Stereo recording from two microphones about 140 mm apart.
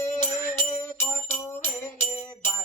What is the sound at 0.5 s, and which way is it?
Music, 15° left (ahead or behind).